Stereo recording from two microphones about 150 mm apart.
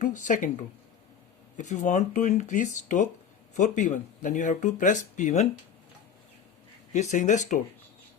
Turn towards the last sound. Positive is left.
turn(degrees=55)  # may be behind; listen again after turning